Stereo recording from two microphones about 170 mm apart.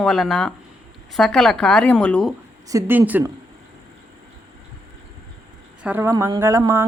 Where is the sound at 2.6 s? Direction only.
15° right (ahead or behind).